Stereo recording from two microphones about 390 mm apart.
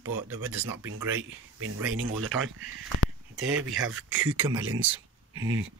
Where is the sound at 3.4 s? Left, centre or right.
Right.